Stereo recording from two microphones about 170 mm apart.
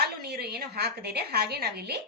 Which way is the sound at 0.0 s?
70° right (ahead or behind).